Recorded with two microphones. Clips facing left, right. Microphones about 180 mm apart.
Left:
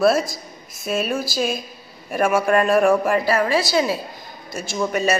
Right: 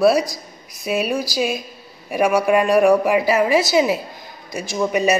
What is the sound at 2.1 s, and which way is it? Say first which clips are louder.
A woman's voice: right 2 dB; 10° right (ahead or behind).